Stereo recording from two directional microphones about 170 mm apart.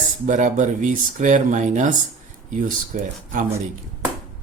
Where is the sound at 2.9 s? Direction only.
50° right (ahead or behind).